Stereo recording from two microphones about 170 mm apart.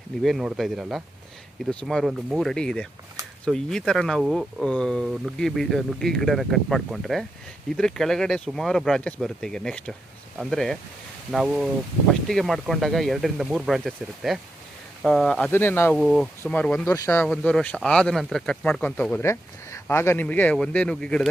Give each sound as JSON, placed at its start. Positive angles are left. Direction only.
{"t": 0.2, "sound": "speech", "side_deg": 0}
{"t": 16.0, "sound": "speech", "side_deg": 0}
{"t": 17.2, "sound": "speech", "side_deg": 5}